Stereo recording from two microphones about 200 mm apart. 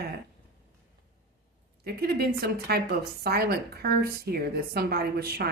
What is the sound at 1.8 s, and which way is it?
A woman's voice, 50° right (ahead or behind).